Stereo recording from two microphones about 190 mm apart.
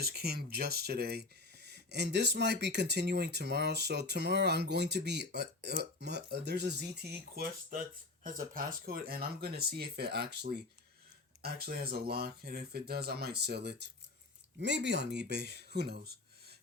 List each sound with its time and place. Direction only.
0.0 s speech: 55° right (ahead or behind)